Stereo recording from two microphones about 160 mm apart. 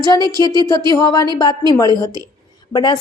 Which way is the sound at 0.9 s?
25° left (ahead or behind).